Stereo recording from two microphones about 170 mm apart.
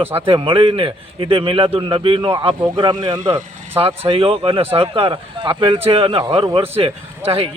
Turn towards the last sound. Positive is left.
turn(degrees=-35)  # may be behind; listen again after turning